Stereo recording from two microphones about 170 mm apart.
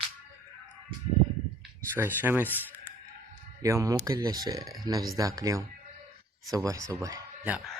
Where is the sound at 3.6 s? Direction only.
20° right (ahead or behind).